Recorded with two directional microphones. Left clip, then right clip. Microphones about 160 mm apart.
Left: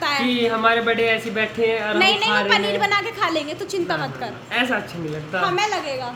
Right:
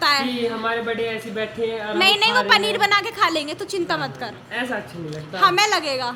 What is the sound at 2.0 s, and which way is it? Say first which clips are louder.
A woman's voice: right 3 dB; 25° right (ahead or behind).